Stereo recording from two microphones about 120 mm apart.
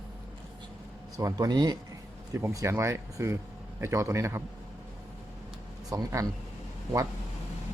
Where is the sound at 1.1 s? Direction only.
30° right (ahead or behind).